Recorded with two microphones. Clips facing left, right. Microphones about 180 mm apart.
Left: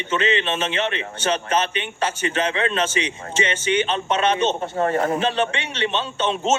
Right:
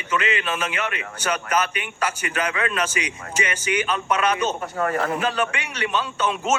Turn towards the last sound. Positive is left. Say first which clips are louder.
# left 2 dB
turn(degrees=25)  # may be behind; listen again after turning